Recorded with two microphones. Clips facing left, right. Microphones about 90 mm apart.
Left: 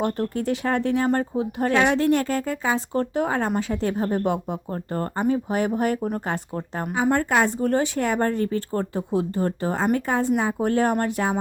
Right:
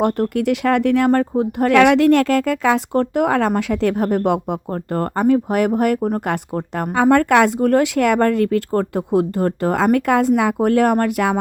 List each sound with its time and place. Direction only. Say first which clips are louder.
0.0 s speech: right 7 dB; 65° right (ahead or behind)
6.0 s speech: right 6 dB; 45° right (ahead or behind)
6.2 s speech: right 6 dB; 65° right (ahead or behind)
8.7 s speech: right 7 dB; 60° right (ahead or behind)